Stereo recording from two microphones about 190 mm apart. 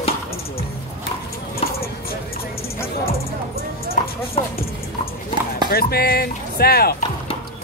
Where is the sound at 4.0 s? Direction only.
45° left (ahead or behind).